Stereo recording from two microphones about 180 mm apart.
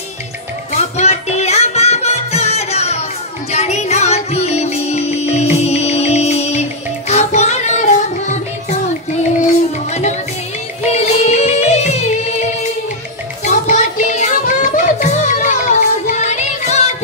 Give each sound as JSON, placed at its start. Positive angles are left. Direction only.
{"t": 0.7, "sound": "music", "side_deg": 40}
{"t": 10.9, "sound": "music", "side_deg": 40}